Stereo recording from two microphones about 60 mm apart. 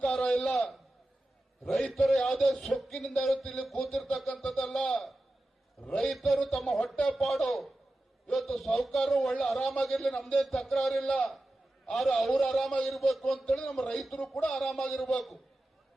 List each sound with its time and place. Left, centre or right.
0.0 s a sound: centre
1.6 s a man's voice: centre
6.1 s a man's voice: centre
6.9 s speech: left
7.2 s a man's voice: centre